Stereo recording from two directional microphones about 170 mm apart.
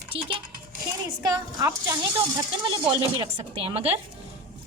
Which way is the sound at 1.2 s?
20° right (ahead or behind).